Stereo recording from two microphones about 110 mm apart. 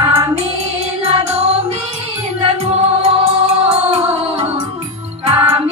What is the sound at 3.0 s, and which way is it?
Music, 70° right (ahead or behind).